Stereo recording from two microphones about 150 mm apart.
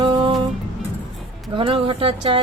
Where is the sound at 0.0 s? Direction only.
35° right (ahead or behind).